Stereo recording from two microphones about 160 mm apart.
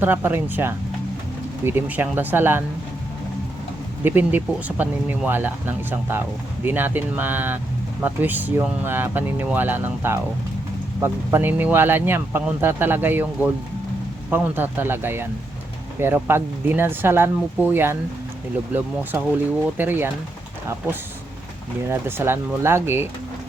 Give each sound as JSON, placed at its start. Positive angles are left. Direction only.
{"t": 0.0, "sound": "speech", "side_deg": -10}
{"t": 4.0, "sound": "speech", "side_deg": -10}
{"t": 19.7, "sound": "speech", "side_deg": -10}
{"t": 21.8, "sound": "speech", "side_deg": -15}